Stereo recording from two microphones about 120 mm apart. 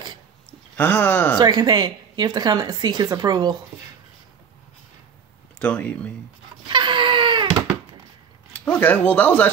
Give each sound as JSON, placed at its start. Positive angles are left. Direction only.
{"t": 0.5, "sound": "speech", "side_deg": 15}
{"t": 1.4, "sound": "a woman's voice", "side_deg": -35}
{"t": 5.6, "sound": "speech", "side_deg": 10}
{"t": 6.7, "sound": "baby cry", "side_deg": -40}
{"t": 8.5, "sound": "speech", "side_deg": 10}